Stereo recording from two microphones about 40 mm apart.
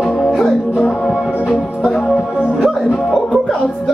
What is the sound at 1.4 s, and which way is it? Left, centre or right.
Music, left.